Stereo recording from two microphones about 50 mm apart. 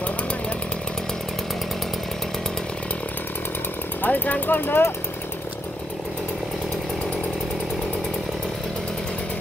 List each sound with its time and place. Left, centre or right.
4.0 s speech: left